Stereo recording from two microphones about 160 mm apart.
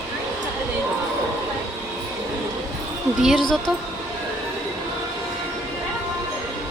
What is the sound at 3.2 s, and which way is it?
Speech, centre (ahead or behind).